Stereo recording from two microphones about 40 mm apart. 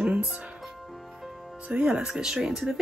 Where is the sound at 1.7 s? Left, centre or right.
Right.